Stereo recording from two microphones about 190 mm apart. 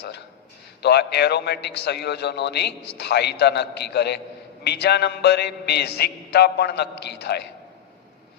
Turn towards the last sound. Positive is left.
turn(degrees=60)  # may be behind; listen again after turning